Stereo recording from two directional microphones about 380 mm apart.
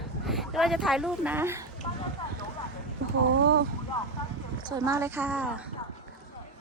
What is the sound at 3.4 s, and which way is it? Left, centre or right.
Speech, right.